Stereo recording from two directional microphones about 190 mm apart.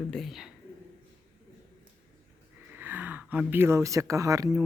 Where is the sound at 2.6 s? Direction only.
10° right (ahead or behind).